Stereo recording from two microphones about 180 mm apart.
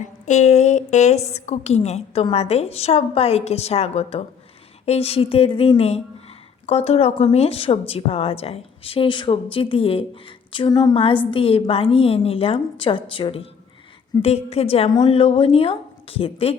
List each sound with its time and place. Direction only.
0.0 s a woman's voice: 40° left (ahead or behind)